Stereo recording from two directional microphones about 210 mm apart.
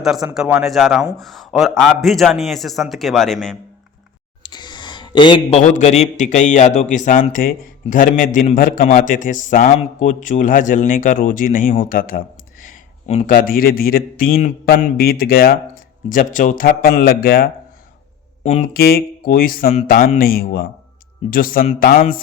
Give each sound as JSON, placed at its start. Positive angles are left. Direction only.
{"t": 0.0, "sound": "a man's voice", "side_deg": 0}
{"t": 4.4, "sound": "a man's voice", "side_deg": 20}
{"t": 18.7, "sound": "speech", "side_deg": 45}